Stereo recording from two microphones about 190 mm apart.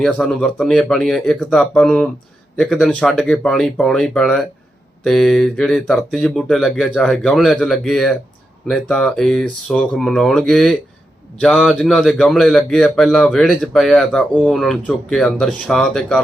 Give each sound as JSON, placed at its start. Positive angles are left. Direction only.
{"t": 0.0, "sound": "a man's voice", "side_deg": 0}